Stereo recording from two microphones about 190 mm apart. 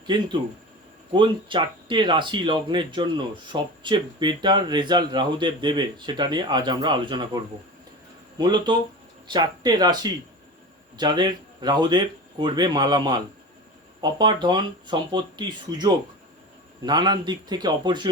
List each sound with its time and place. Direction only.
0.0 s speech: 25° right (ahead or behind)